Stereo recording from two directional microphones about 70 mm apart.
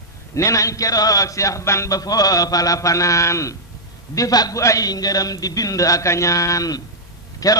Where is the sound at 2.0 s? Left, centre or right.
Left.